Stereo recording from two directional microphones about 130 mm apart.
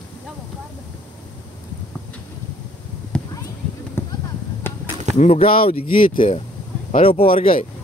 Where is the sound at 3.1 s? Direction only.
5° left (ahead or behind).